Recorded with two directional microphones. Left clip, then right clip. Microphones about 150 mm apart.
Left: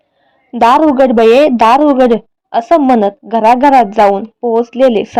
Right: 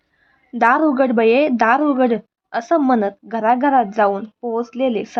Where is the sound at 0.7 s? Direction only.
20° left (ahead or behind).